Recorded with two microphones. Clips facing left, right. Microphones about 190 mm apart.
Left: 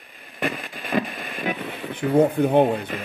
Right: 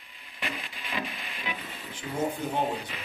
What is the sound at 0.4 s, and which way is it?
Radio, 50° left (ahead or behind).